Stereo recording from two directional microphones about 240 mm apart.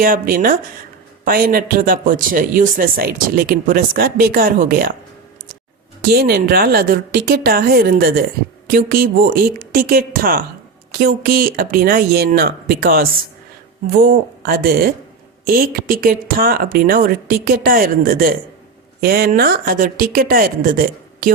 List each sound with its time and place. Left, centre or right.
0.0 s speech: right
6.0 s speech: right